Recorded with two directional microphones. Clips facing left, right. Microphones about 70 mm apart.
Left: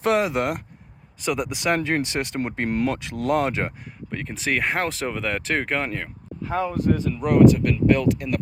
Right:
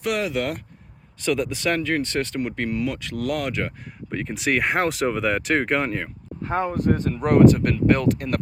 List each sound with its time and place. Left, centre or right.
0.0 s speech: left
1.2 s speech: centre
2.6 s speech: left
3.0 s speech: left
4.1 s speech: centre
6.4 s speech: right